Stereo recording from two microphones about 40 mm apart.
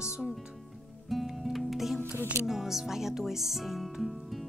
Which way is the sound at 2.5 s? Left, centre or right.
Centre.